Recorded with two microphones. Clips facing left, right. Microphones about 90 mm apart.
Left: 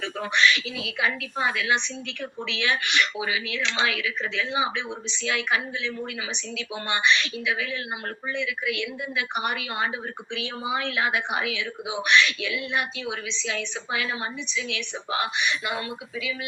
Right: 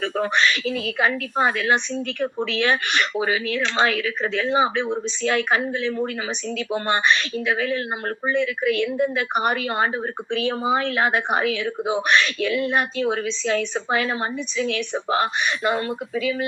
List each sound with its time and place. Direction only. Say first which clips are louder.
0.0 s speech: right 3 dB; 45° right (ahead or behind)